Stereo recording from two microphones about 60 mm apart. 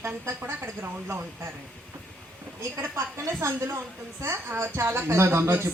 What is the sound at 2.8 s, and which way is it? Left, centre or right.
Speech, right.